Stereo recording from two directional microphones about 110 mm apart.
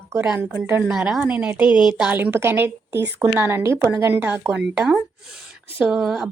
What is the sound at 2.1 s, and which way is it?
A woman's voice, 20° right (ahead or behind).